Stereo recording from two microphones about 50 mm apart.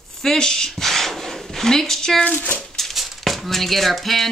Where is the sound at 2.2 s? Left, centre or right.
Left.